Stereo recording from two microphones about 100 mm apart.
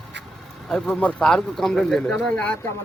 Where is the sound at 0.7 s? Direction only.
5° left (ahead or behind).